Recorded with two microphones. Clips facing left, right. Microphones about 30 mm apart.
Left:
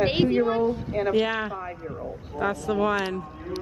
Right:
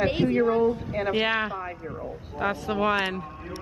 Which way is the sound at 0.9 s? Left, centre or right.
Centre.